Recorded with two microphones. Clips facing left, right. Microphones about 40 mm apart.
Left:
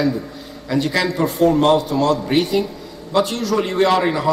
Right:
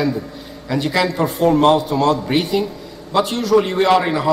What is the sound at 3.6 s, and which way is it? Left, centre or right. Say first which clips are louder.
Speech: right 1 dB; centre.